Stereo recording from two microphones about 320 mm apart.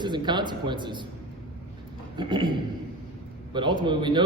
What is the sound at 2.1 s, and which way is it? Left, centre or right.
Speech, centre.